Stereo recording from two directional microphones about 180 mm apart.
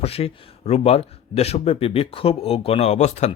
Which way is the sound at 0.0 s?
35° left (ahead or behind).